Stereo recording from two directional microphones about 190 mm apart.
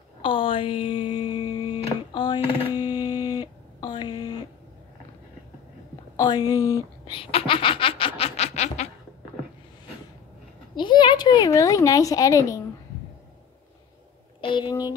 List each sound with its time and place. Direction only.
0.2 s music: 25° left (ahead or behind)
6.1 s a woman's voice: 20° left (ahead or behind)
7.1 s snicker: 30° left (ahead or behind)
10.8 s a woman's voice: 25° left (ahead or behind)
14.4 s speech: 25° left (ahead or behind)